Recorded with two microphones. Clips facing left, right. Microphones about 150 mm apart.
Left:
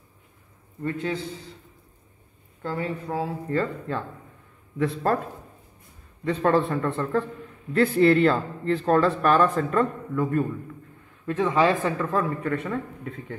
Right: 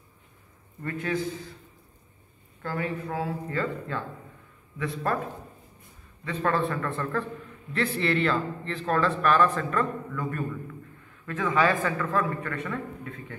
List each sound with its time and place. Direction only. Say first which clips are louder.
0.8 s speech: left 2 dB; 25° left (ahead or behind)
2.6 s speech: left 2 dB; 25° left (ahead or behind)
6.2 s speech: left 5 dB; 30° left (ahead or behind)
7.7 s speech: left 8 dB; 40° left (ahead or behind); by 13.4 s 25° left (ahead or behind)